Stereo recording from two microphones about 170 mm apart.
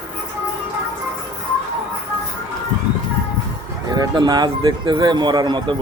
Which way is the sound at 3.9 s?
25° right (ahead or behind).